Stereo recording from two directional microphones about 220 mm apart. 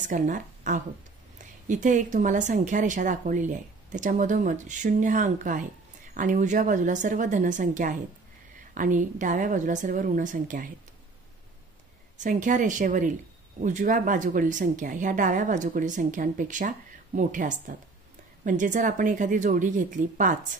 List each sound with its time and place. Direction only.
0.1 s speech: 35° right (ahead or behind)
12.2 s speech: 35° right (ahead or behind)